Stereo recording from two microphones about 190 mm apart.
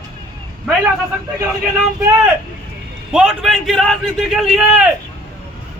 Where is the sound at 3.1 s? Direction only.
5° right (ahead or behind).